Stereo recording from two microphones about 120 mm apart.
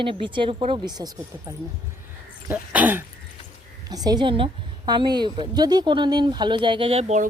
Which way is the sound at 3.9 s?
35° right (ahead or behind).